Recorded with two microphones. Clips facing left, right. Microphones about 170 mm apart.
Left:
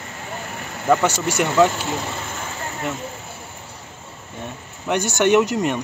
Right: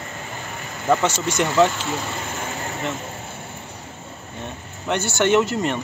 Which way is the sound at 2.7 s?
Centre (ahead or behind).